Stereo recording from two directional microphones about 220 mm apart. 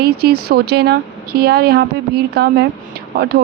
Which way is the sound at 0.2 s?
45° right (ahead or behind).